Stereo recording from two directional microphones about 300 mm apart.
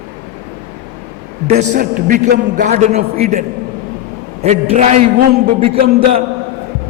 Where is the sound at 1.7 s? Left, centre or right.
Right.